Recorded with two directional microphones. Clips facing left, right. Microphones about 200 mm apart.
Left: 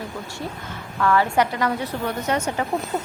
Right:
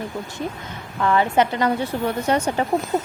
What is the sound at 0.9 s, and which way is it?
A woman's voice, 20° right (ahead or behind).